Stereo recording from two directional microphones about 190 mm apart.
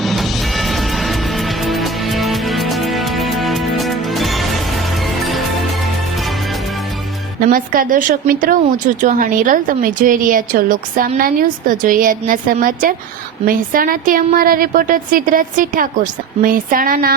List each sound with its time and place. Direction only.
0.0 s music: centre (ahead or behind)
7.3 s a woman's voice: 45° right (ahead or behind)